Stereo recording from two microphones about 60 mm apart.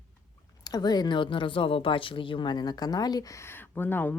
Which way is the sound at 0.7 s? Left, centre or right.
Left.